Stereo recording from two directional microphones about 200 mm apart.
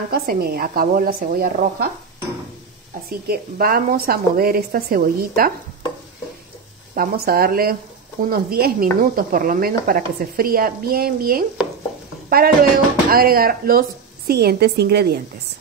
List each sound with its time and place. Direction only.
0.1 s stir: 50° right (ahead or behind)
3.1 s stir: 50° right (ahead or behind)
7.0 s stir: 50° right (ahead or behind)